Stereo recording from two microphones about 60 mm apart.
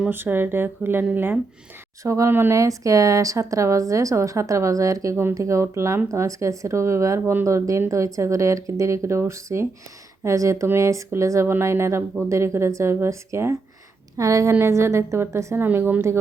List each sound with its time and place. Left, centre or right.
0.1 s speech: right
2.0 s a woman's voice: right
2.5 s a woman's voice: right
15.5 s speech: right